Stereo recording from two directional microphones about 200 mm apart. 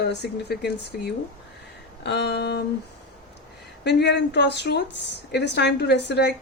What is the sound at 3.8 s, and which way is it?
Speech, 60° left (ahead or behind).